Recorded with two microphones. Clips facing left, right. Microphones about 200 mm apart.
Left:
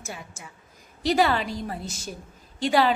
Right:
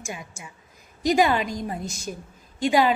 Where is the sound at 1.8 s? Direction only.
5° left (ahead or behind).